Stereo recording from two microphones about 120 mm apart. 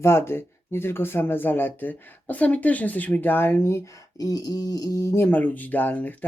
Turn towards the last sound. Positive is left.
turn(degrees=15)  # may be behind; listen again after turning